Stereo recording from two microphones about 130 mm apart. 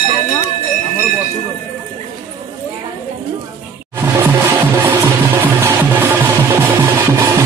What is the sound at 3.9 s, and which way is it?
Music, 20° right (ahead or behind).